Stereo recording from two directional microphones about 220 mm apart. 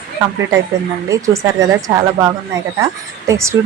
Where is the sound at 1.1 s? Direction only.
15° right (ahead or behind).